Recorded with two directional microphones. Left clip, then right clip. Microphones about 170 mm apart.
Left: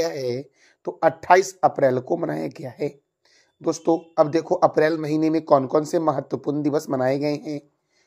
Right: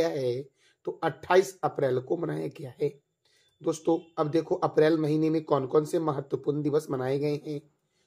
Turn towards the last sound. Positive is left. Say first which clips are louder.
# left 5 dB
turn(degrees=25)  # may be behind; listen again after turning